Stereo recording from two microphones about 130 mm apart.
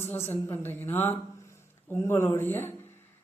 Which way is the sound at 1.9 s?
20° left (ahead or behind).